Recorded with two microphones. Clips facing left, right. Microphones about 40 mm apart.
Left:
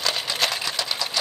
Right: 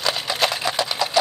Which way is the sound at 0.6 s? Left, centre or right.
Centre.